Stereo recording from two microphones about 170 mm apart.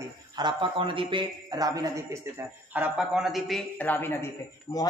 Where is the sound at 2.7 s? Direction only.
5° right (ahead or behind).